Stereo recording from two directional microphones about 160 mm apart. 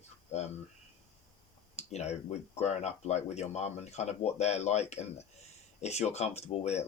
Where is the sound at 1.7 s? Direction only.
45° left (ahead or behind).